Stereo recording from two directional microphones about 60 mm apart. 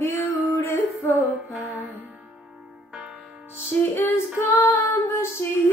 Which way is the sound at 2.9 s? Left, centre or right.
Centre.